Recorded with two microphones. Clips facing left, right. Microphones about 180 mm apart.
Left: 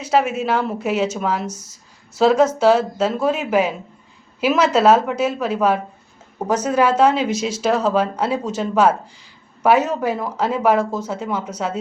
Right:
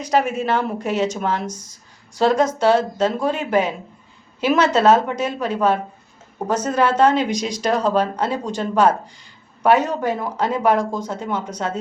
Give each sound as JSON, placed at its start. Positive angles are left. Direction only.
{"t": 0.0, "sound": "a woman's voice", "side_deg": 5}